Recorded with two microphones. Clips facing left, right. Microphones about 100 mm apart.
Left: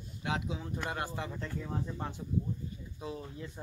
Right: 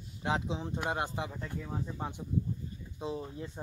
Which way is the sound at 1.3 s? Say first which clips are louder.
Left 1 dB; 10° right (ahead or behind).